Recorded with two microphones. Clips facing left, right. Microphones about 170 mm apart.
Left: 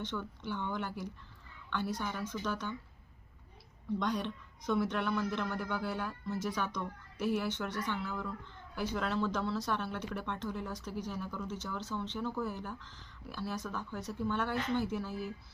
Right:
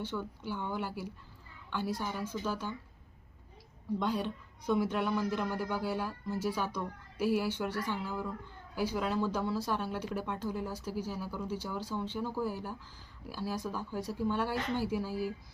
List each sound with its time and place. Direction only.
0.0 s speech: 10° right (ahead or behind)
4.0 s speech: 10° right (ahead or behind)